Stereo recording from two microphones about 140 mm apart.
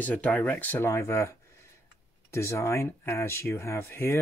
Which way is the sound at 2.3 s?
20° left (ahead or behind).